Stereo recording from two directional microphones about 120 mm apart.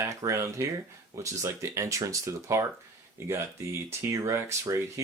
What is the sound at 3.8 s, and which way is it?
Speech, 25° right (ahead or behind).